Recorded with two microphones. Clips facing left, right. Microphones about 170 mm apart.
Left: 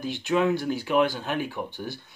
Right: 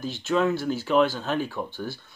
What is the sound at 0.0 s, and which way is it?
Speech, 15° left (ahead or behind).